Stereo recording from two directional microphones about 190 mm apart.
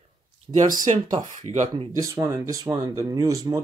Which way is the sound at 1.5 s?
35° right (ahead or behind).